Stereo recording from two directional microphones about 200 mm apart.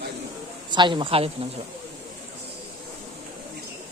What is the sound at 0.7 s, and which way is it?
Speech, 25° right (ahead or behind).